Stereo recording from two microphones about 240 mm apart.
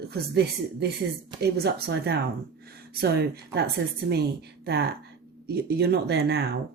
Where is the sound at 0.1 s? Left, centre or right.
Right.